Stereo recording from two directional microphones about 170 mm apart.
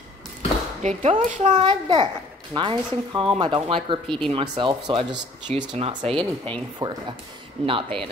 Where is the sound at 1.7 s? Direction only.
30° right (ahead or behind).